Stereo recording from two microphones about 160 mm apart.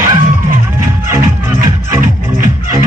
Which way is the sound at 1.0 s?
15° right (ahead or behind).